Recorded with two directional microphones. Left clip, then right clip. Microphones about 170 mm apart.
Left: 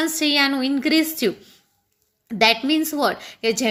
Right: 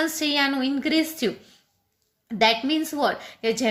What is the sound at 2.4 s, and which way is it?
A woman's voice, 25° left (ahead or behind).